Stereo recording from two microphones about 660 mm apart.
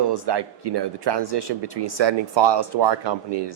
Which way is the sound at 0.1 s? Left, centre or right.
Right.